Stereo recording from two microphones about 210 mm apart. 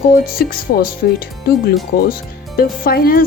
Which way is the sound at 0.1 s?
45° left (ahead or behind).